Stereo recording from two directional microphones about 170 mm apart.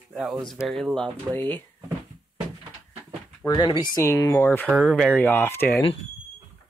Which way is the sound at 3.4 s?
25° left (ahead or behind).